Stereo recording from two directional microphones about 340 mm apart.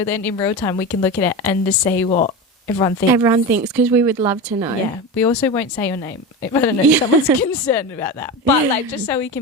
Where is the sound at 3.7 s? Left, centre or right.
Centre.